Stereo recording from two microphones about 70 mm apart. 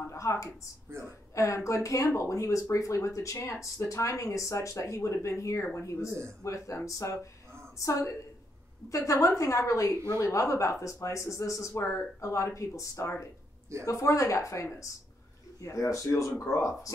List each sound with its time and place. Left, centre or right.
0.0 s speech: left
8.9 s speech: left